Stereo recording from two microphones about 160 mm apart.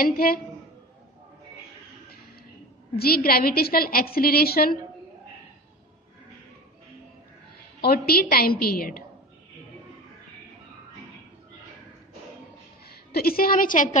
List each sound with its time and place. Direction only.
0.0 s a woman's voice: 65° left (ahead or behind)
3.0 s a woman's voice: 70° left (ahead or behind)
7.8 s a woman's voice: 75° left (ahead or behind)
12.8 s a woman's voice: 75° left (ahead or behind)